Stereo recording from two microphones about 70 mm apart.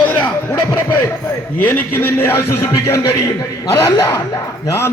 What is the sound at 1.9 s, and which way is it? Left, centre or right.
A man's voice, left.